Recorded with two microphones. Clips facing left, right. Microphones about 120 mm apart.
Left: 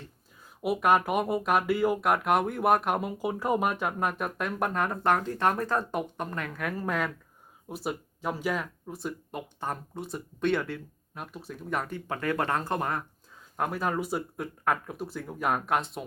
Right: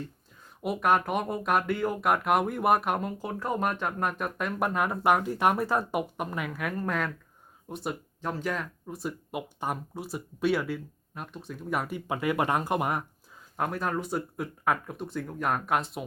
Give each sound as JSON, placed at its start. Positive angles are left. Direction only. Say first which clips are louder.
{"t": 0.6, "sound": "speech", "louder": "left 1 dB", "side_deg": 5}
{"t": 13.6, "sound": "speech", "louder": "left 1 dB", "side_deg": 0}